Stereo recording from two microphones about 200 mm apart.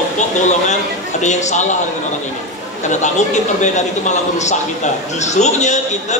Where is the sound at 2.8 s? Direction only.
35° left (ahead or behind).